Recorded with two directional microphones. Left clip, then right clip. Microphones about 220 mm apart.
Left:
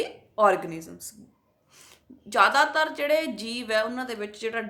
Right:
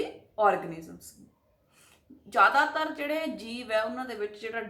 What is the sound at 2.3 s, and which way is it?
A woman's voice, 45° left (ahead or behind).